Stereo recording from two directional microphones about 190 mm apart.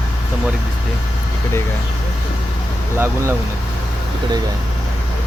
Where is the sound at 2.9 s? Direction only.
15° right (ahead or behind).